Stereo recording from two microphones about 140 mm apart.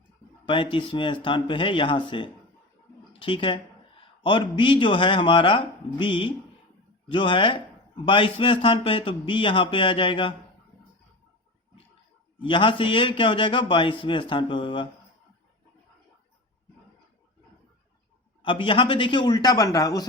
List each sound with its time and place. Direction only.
0.4 s a man's voice: 35° left (ahead or behind)
12.4 s a man's voice: 35° left (ahead or behind)
18.4 s a man's voice: 40° left (ahead or behind)